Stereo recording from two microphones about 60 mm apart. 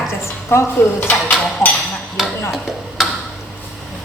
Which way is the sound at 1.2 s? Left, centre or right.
Centre.